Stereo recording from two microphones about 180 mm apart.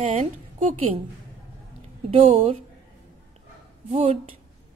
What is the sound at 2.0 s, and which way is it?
Speech, 35° right (ahead or behind).